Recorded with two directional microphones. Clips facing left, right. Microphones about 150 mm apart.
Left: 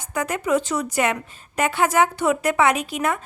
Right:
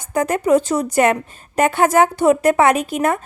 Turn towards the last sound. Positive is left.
turn(degrees=-45)  # may be behind; listen again after turning